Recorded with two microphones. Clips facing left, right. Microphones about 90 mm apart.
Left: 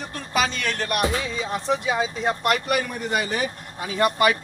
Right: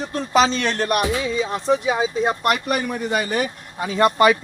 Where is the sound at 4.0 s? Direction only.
25° right (ahead or behind).